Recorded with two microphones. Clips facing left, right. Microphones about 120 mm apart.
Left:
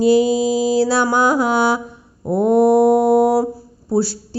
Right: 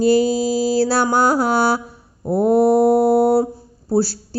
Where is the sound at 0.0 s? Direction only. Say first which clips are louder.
Left 2 dB; 40° right (ahead or behind).